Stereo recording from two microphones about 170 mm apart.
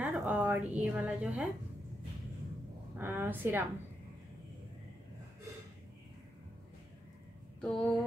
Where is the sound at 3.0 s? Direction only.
10° right (ahead or behind).